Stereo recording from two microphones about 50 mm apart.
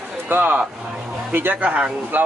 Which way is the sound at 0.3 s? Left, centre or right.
Right.